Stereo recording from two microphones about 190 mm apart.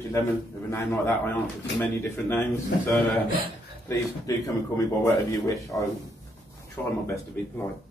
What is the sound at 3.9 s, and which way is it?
Speech, 15° left (ahead or behind).